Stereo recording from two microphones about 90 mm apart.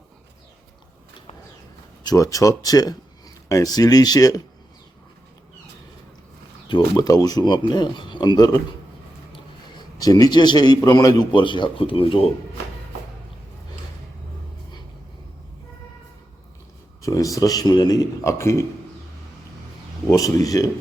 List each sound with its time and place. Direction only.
2.0 s speech: 40° left (ahead or behind)
6.7 s speech: 65° left (ahead or behind)
7.0 s speech: 40° left (ahead or behind)
10.0 s speech: 45° left (ahead or behind)
11.3 s speech: 65° left (ahead or behind); by 12.3 s 90° left
17.0 s a man's voice: 40° left (ahead or behind)
20.1 s a man's voice: 40° left (ahead or behind)